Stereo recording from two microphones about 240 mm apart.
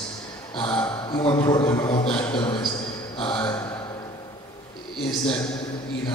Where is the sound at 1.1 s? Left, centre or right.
Centre.